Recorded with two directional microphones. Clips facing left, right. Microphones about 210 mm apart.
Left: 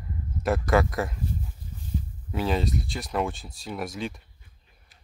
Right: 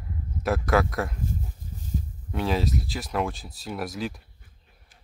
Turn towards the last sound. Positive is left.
turn(degrees=0)  # may be behind; listen again after turning